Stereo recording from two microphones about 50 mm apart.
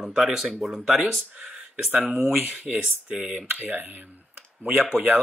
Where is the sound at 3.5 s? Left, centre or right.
Right.